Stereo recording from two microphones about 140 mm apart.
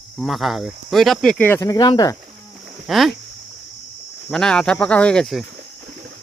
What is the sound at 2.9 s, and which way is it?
Speech, centre (ahead or behind).